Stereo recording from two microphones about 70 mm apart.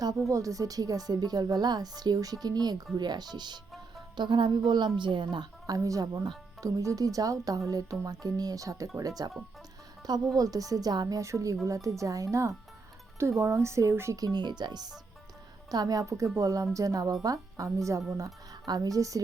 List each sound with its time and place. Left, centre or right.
0.3 s a woman's voice: right
5.7 s speech: right
10.3 s speech: right
11.2 s speech: right
14.2 s speech: right
15.7 s speech: right
18.6 s speech: right